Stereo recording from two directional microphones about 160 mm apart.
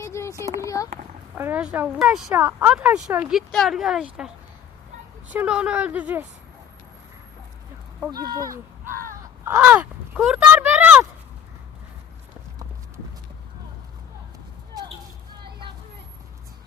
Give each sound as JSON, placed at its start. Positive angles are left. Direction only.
{"t": 0.0, "sound": "a sound", "side_deg": 15}
{"t": 0.6, "sound": "speech", "side_deg": 20}
{"t": 1.4, "sound": "speech", "side_deg": -10}
{"t": 5.3, "sound": "speech", "side_deg": -10}
{"t": 8.1, "sound": "speech", "side_deg": -25}
{"t": 8.9, "sound": "caw", "side_deg": -60}
{"t": 9.4, "sound": "speech", "side_deg": -15}